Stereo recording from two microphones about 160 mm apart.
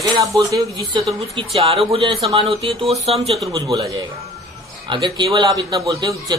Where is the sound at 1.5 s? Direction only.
35° right (ahead or behind).